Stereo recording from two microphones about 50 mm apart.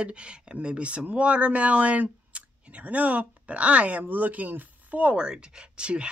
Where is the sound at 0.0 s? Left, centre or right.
Right.